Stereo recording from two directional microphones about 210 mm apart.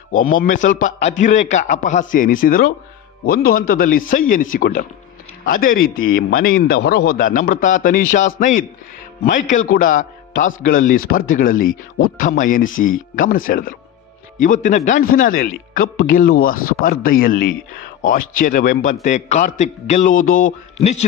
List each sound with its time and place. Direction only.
0.4 s a man's voice: 40° left (ahead or behind)